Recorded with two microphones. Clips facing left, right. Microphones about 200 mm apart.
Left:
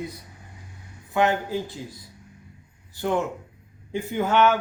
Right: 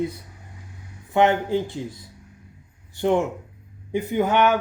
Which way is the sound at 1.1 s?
20° right (ahead or behind).